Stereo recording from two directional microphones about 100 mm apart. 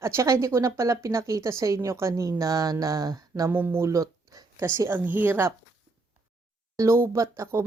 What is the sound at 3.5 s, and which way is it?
Speech, 20° right (ahead or behind).